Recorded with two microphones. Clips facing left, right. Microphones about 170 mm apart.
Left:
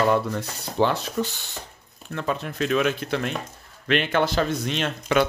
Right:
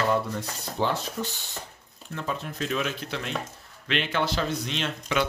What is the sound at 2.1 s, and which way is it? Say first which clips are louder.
Speech: left 5 dB; 70° left (ahead or behind).